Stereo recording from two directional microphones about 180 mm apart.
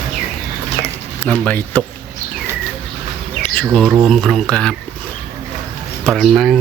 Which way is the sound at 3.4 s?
5° left (ahead or behind).